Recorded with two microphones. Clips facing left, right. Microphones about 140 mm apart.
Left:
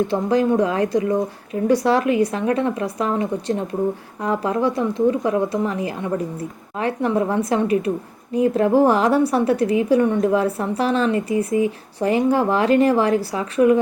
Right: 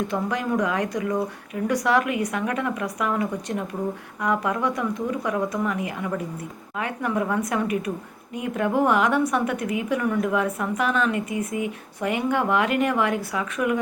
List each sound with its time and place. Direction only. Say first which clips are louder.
0.0 s a woman's voice: left 7 dB; 30° left (ahead or behind)